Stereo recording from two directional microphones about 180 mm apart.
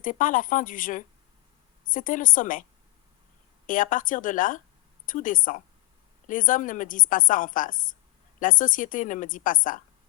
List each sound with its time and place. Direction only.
0.0 s a woman's voice: 45° left (ahead or behind)
3.7 s a woman's voice: 50° left (ahead or behind)